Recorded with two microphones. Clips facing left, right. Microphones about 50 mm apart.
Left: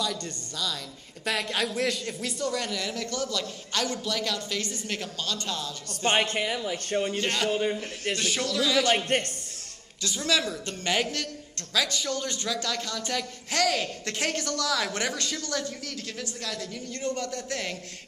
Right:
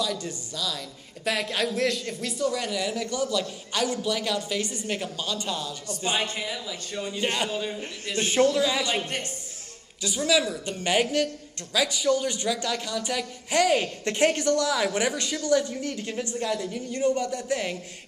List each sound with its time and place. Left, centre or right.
0.0 s a woman's voice: centre
5.9 s speech: left
7.2 s a man's voice: centre
7.4 s speech: left
8.2 s a man's voice: right
8.8 s speech: left
10.0 s a man's voice: centre